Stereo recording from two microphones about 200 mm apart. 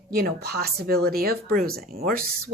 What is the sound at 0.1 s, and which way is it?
Speech, 50° right (ahead or behind).